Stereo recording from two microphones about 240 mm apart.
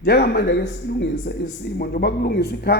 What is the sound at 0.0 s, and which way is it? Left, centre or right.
Speech, left.